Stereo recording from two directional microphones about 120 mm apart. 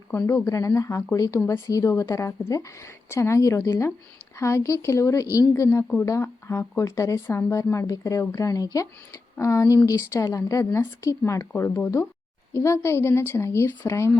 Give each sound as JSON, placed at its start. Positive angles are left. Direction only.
{"t": 0.3, "sound": "speech", "side_deg": 20}